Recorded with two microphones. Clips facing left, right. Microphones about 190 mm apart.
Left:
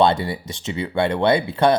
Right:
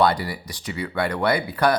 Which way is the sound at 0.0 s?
25° left (ahead or behind).